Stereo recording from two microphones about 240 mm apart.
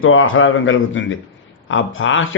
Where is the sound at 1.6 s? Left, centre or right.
Left.